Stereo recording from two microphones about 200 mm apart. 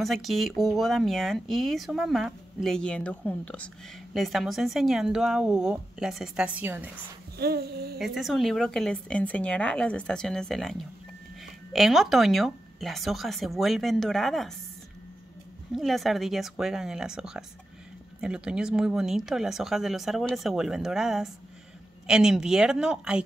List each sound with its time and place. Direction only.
0.0 s speech: centre (ahead or behind)
7.3 s speech: 50° right (ahead or behind)
8.0 s speech: centre (ahead or behind)
15.7 s speech: centre (ahead or behind)